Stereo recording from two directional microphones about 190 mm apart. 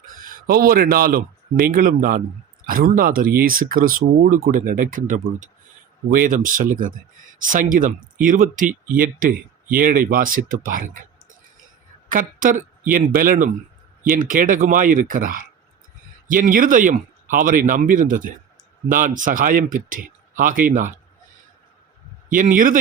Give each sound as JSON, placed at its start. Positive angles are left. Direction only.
{"t": 0.0, "sound": "speech", "side_deg": -45}
{"t": 12.1, "sound": "speech", "side_deg": -45}
{"t": 22.3, "sound": "speech", "side_deg": -45}